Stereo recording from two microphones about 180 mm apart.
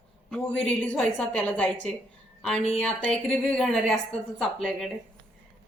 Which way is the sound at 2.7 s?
5° left (ahead or behind).